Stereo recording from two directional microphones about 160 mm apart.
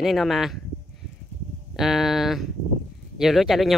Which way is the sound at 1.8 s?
Centre (ahead or behind).